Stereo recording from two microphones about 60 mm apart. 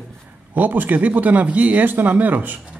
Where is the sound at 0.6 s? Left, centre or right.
Right.